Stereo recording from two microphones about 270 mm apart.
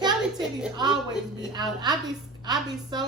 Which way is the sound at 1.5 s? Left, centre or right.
Centre.